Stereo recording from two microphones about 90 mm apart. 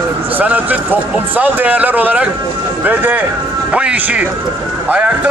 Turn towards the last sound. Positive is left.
turn(degrees=-15)  # may be behind; listen again after turning